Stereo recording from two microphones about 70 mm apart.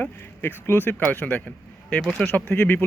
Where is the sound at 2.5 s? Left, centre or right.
Left.